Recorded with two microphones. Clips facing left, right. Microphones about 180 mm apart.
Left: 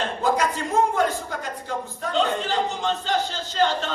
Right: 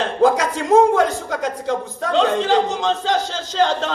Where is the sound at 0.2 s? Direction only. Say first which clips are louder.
Right 8 dB; 90° right.